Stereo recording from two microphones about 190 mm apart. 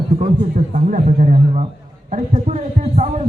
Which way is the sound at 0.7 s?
40° right (ahead or behind).